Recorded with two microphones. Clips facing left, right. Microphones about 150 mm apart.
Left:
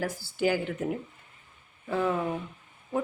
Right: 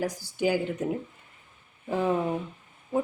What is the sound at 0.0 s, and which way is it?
Speech, 15° right (ahead or behind).